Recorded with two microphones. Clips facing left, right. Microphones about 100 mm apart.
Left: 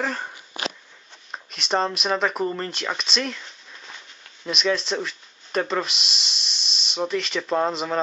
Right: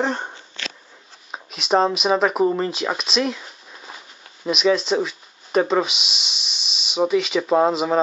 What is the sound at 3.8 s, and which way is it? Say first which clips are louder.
Insect: right 4 dB; 35° right (ahead or behind).